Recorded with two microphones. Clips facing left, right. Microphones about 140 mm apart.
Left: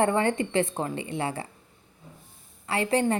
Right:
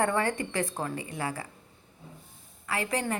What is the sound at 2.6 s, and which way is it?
Speech, 30° left (ahead or behind).